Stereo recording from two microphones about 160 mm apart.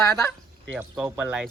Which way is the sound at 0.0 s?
20° left (ahead or behind).